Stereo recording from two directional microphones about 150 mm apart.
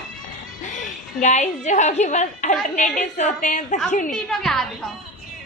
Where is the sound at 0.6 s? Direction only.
55° left (ahead or behind).